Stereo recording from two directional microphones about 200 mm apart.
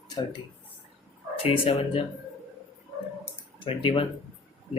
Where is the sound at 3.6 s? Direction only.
25° left (ahead or behind).